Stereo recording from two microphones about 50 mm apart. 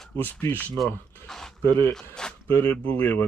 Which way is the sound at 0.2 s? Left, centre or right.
Left.